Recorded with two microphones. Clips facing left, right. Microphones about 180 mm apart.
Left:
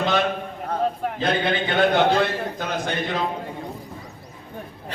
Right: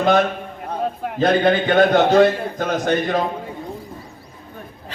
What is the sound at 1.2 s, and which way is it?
A man's voice, 45° right (ahead or behind).